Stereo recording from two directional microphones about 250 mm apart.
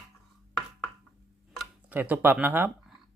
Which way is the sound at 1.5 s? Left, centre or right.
Centre.